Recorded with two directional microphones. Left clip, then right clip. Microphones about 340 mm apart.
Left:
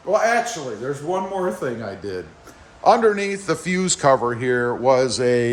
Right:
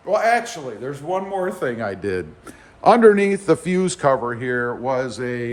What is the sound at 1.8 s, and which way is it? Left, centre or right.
A man's voice, right.